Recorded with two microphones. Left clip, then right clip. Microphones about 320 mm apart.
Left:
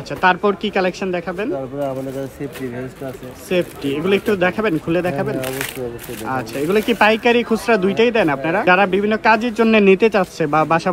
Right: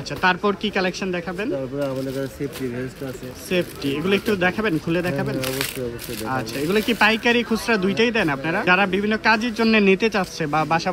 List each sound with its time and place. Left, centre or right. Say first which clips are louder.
0.5 s speech: left 4 dB; centre
3.4 s speech: left 4 dB; centre